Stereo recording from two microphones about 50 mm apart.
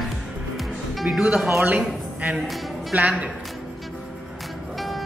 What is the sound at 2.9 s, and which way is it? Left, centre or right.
Music, right.